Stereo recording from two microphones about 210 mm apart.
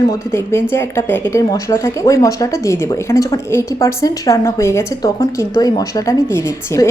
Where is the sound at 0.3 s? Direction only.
10° left (ahead or behind).